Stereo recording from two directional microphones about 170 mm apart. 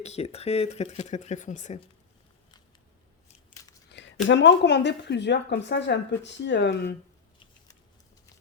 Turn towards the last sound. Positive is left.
turn(degrees=90)